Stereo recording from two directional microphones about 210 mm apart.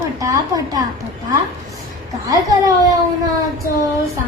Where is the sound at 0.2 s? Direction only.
15° right (ahead or behind).